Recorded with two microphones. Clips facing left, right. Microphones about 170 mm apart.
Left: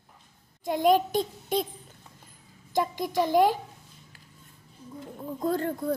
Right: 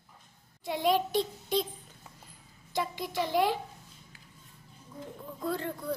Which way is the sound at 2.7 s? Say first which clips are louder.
Left 6 dB; 45° left (ahead or behind).